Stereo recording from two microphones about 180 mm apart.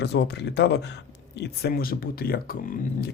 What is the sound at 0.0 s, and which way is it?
Speech, 70° left (ahead or behind).